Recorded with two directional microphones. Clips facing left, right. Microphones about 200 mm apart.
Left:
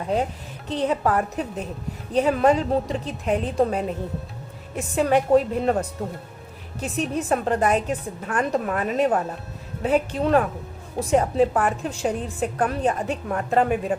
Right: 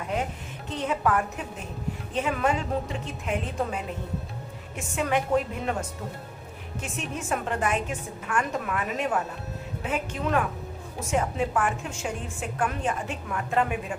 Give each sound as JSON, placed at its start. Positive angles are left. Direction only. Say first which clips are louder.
{"t": 0.7, "sound": "a woman's voice", "louder": "left 4 dB", "side_deg": 35}